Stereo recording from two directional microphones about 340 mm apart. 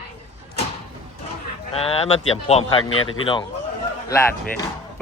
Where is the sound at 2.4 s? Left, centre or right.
Centre.